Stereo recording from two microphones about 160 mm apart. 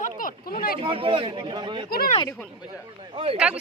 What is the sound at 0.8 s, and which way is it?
Speech, 35° right (ahead or behind).